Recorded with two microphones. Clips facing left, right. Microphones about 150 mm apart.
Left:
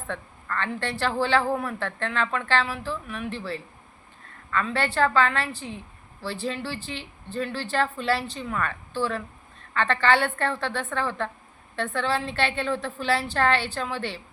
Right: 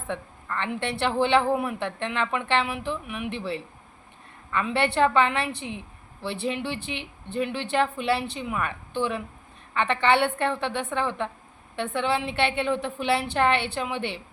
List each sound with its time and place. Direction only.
0.1 s a woman's voice: 15° right (ahead or behind)
6.5 s a woman's voice: 20° right (ahead or behind)